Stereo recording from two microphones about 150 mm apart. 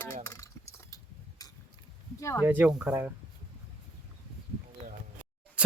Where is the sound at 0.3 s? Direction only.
20° left (ahead or behind).